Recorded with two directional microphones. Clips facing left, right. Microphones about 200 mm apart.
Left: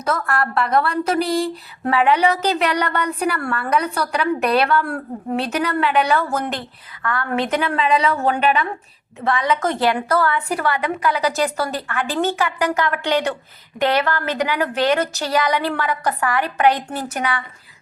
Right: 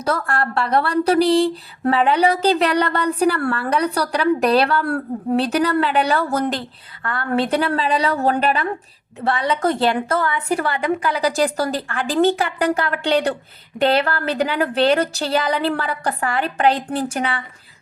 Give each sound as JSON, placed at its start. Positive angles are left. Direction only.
{"t": 0.0, "sound": "a woman's voice", "side_deg": -30}